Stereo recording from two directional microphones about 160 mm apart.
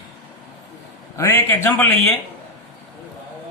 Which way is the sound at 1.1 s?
15° left (ahead or behind).